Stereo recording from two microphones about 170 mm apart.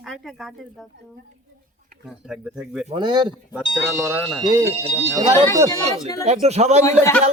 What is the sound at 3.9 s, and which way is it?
Speech, 15° right (ahead or behind).